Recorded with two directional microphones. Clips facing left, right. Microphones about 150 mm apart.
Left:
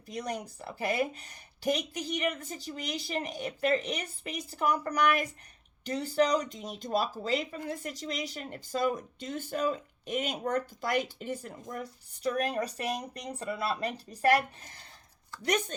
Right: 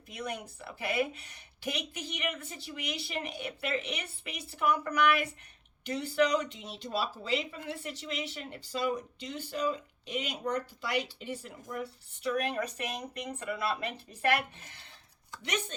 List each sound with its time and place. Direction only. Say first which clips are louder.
0.1 s a woman's voice: left 3 dB; 40° left (ahead or behind)